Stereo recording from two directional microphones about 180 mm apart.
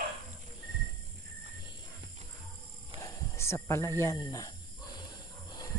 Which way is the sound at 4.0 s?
20° left (ahead or behind).